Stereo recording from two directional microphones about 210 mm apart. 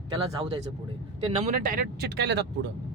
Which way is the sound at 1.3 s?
30° right (ahead or behind).